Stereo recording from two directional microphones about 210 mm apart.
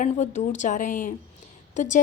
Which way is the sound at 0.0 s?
35° left (ahead or behind).